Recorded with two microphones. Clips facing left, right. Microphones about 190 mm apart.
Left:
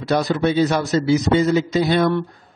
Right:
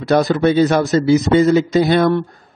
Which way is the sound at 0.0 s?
50° right (ahead or behind).